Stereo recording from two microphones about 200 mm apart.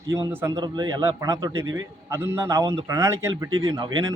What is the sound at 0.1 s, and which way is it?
Speech, 10° right (ahead or behind).